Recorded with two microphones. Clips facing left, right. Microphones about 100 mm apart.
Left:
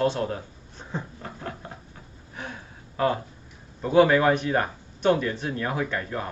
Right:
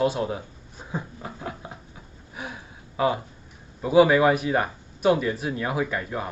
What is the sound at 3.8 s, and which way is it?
Speech, 5° right (ahead or behind).